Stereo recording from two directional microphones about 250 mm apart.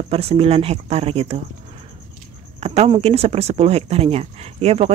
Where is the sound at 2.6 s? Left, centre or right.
Right.